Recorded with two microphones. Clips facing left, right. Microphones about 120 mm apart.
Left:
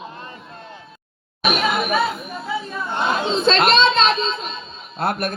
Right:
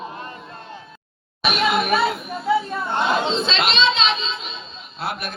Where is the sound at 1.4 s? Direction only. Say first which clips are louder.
Right 1 dB; 45° left (ahead or behind).